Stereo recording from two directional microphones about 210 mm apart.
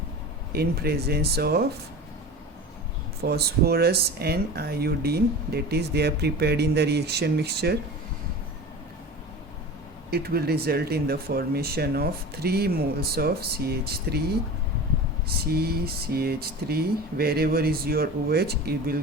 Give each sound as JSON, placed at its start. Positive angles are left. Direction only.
{"t": 0.5, "sound": "speech", "side_deg": -50}
{"t": 3.2, "sound": "speech", "side_deg": -50}
{"t": 10.1, "sound": "speech", "side_deg": -50}
{"t": 15.4, "sound": "speech", "side_deg": -45}